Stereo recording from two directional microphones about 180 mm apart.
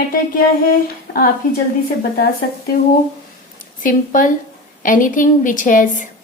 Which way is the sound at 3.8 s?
45° left (ahead or behind).